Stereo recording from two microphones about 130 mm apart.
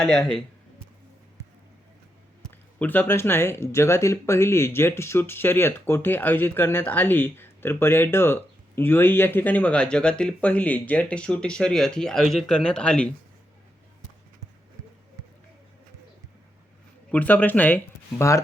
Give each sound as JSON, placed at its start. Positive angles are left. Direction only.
{"t": 0.0, "sound": "speech", "side_deg": 5}
{"t": 2.7, "sound": "speech", "side_deg": 15}
{"t": 17.1, "sound": "speech", "side_deg": 10}